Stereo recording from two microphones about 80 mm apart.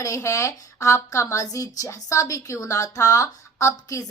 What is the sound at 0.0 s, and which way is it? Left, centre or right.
A woman's voice, left.